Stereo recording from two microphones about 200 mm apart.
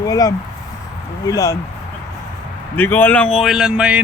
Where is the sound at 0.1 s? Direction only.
20° left (ahead or behind).